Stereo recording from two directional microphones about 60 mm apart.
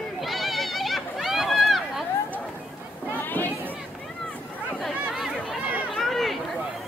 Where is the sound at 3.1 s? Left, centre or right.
Left.